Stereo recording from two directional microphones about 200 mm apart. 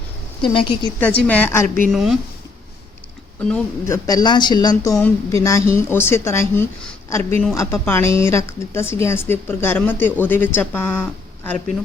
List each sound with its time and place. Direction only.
0.4 s speech: 25° left (ahead or behind)
0.9 s a woman's voice: 5° left (ahead or behind)
1.6 s a woman's voice: 45° right (ahead or behind)
1.9 s speech: centre (ahead or behind)
3.5 s a woman's voice: 15° left (ahead or behind)